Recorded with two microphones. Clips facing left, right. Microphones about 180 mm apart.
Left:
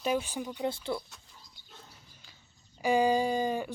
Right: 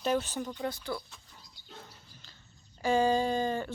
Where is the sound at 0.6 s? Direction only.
25° left (ahead or behind).